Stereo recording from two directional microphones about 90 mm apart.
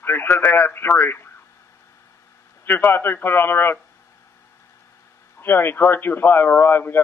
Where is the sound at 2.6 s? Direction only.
20° left (ahead or behind).